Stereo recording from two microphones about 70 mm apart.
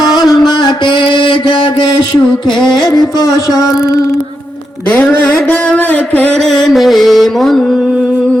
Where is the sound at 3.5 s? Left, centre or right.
Left.